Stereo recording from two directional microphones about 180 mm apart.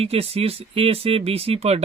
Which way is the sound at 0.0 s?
35° right (ahead or behind).